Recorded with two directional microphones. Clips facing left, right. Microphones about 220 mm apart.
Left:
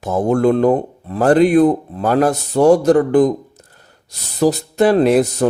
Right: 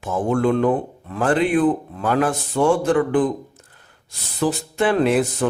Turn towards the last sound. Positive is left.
turn(degrees=40)  # may be behind; listen again after turning